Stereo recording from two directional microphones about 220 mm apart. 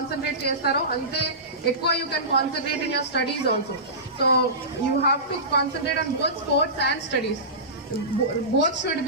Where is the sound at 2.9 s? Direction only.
45° left (ahead or behind).